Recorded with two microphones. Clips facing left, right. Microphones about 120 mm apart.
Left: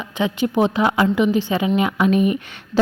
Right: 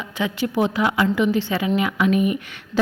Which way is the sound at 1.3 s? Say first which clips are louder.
Left 3 dB; 15° left (ahead or behind).